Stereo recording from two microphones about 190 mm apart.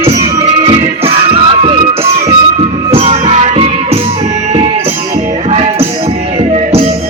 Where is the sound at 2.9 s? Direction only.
30° right (ahead or behind).